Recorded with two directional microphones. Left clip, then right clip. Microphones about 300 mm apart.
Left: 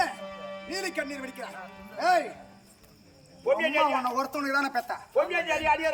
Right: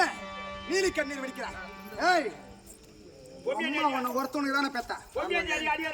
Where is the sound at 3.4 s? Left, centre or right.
Centre.